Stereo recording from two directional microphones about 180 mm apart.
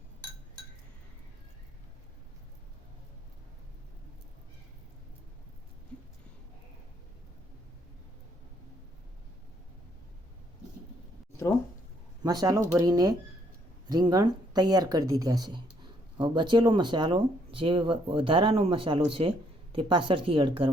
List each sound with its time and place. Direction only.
12.2 s speech: 20° right (ahead or behind)